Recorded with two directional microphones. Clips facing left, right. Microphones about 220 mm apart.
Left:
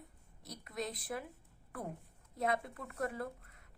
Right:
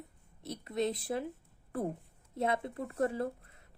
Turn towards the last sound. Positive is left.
turn(degrees=-30)  # may be behind; listen again after turning